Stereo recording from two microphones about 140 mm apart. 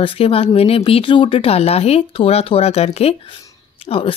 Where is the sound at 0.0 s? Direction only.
40° left (ahead or behind).